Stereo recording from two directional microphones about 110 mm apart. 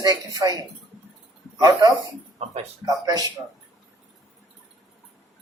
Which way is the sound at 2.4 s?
75° right (ahead or behind).